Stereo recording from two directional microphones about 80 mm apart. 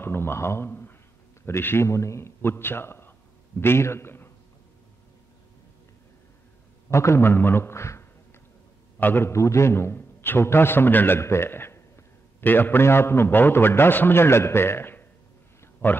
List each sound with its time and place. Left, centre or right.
0.0 s a man's voice: left
6.9 s a man's voice: left
9.3 s a man's voice: left